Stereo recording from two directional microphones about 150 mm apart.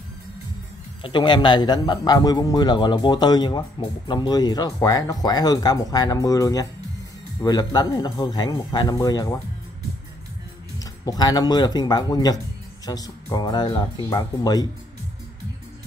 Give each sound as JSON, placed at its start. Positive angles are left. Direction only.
{"t": 1.0, "sound": "speech", "side_deg": 30}
{"t": 10.8, "sound": "speech", "side_deg": 25}